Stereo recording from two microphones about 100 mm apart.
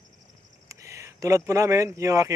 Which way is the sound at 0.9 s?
35° right (ahead or behind).